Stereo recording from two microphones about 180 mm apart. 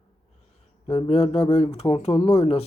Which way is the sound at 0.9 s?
35° left (ahead or behind).